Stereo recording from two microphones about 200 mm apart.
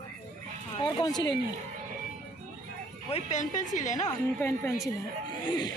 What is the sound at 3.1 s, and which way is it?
Speech, 40° left (ahead or behind).